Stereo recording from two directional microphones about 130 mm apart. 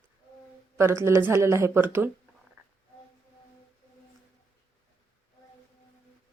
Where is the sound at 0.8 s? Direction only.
20° right (ahead or behind).